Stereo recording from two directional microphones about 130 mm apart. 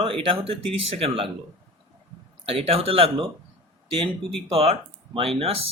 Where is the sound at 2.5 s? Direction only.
50° right (ahead or behind).